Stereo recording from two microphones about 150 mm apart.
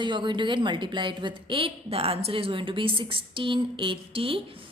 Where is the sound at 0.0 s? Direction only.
30° right (ahead or behind).